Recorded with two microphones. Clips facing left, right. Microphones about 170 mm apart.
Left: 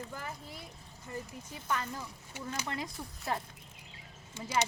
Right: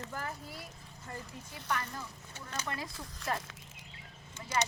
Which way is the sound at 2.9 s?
90° right.